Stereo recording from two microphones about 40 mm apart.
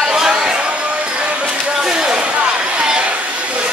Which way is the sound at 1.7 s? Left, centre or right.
Centre.